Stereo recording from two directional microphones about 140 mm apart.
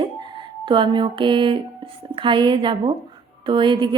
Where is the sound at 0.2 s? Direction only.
35° right (ahead or behind).